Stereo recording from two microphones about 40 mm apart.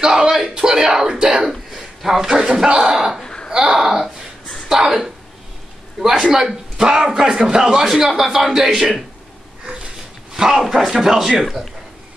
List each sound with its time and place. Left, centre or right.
0.0 s a sound: centre
1.5 s a man's voice: centre
3.4 s a sound: centre
6.1 s a man's voice: centre
7.9 s a man's voice: centre
10.3 s a man's voice: centre